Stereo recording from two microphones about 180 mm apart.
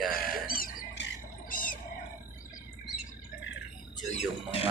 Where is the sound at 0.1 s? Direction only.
55° left (ahead or behind).